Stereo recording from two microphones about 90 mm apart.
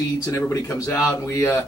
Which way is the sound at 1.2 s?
35° left (ahead or behind).